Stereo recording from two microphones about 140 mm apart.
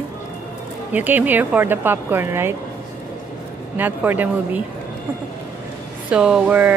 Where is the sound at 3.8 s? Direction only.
15° right (ahead or behind).